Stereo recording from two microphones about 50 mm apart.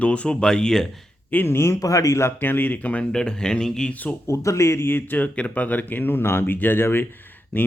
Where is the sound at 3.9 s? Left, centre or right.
Left.